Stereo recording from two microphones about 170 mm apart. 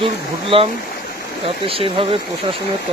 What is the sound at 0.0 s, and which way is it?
Stream, 35° right (ahead or behind).